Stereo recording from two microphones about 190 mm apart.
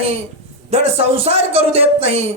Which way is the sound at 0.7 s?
30° right (ahead or behind).